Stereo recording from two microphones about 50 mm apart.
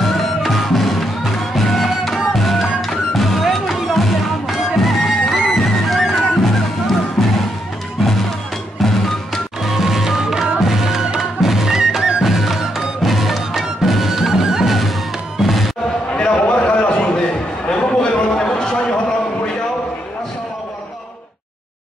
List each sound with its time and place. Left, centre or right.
0.0 s music: centre
9.6 s music: centre
16.1 s a sound: left